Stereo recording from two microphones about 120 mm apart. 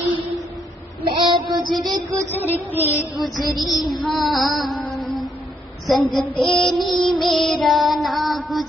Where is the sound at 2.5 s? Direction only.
15° left (ahead or behind).